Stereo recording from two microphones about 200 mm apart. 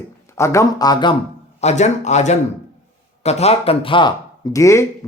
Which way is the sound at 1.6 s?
35° left (ahead or behind).